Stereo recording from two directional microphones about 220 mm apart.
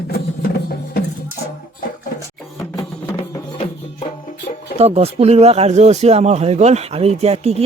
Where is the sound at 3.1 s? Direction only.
20° left (ahead or behind).